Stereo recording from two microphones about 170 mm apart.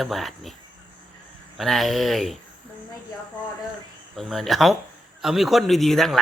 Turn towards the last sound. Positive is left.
turn(degrees=0)  # may be behind; listen again after turning